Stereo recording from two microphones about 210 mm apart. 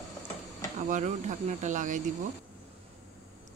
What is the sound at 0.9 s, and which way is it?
Speech, 35° right (ahead or behind).